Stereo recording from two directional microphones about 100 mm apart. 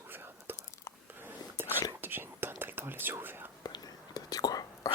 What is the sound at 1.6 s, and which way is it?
Whispering, 20° right (ahead or behind).